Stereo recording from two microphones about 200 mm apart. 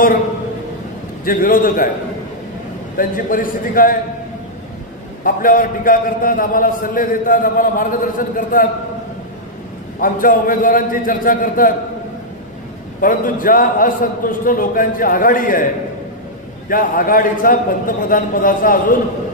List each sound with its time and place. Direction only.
1.2 s a man's voice: 45° left (ahead or behind)
3.0 s a man's voice: 45° left (ahead or behind)
5.2 s a man's voice: 45° left (ahead or behind)
9.9 s a man's voice: 45° left (ahead or behind)
13.0 s a man's voice: 45° left (ahead or behind)